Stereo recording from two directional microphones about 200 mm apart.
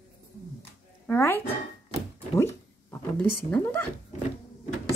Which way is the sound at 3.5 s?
10° left (ahead or behind).